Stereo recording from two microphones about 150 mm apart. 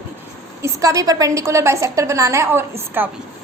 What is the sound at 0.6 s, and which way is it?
A woman's voice, 20° right (ahead or behind).